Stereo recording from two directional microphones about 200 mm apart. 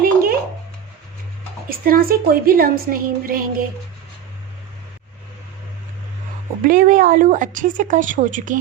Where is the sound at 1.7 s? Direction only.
45° right (ahead or behind).